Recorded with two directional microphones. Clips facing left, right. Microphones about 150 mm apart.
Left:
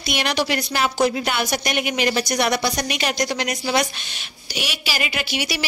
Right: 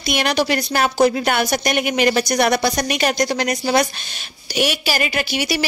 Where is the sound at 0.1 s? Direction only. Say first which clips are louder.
Right 4 dB; 45° right (ahead or behind).